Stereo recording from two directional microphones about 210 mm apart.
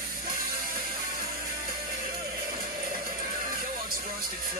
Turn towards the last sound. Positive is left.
turn(degrees=-45)  # may be behind; listen again after turning